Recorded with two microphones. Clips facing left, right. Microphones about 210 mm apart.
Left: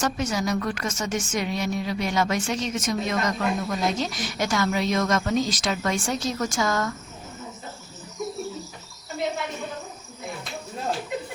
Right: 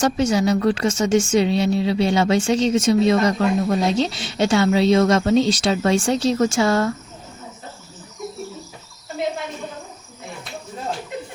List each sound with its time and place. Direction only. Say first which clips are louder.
0.0 s speech: right 7 dB; 30° right (ahead or behind)